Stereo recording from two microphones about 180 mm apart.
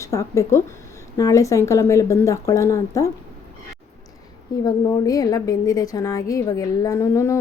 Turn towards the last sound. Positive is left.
turn(degrees=15)  # may be behind; listen again after turning